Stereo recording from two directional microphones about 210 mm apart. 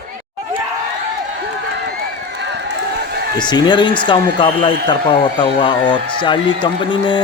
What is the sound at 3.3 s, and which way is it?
Speech, 20° left (ahead or behind).